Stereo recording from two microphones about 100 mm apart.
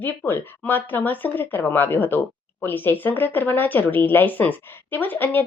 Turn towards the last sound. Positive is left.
turn(degrees=20)  # may be behind; listen again after turning